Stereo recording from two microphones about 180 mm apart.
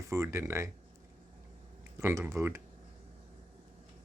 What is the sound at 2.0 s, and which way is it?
Speech, 15° right (ahead or behind).